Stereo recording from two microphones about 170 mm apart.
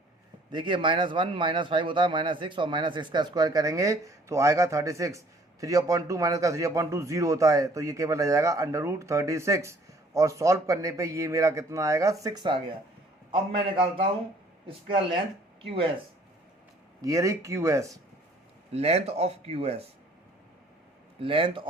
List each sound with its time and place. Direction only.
0.5 s speech: 30° right (ahead or behind)
17.0 s speech: 20° right (ahead or behind)
18.7 s speech: 40° right (ahead or behind)
21.2 s speech: 30° right (ahead or behind)